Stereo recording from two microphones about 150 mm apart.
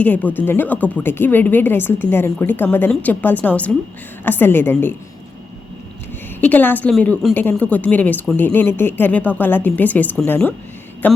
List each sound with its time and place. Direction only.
0.0 s a woman's voice: 10° left (ahead or behind)
6.4 s a woman's voice: 10° left (ahead or behind)